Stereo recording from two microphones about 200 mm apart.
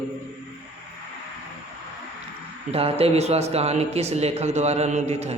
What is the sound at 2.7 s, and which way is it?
A man's voice, 30° right (ahead or behind).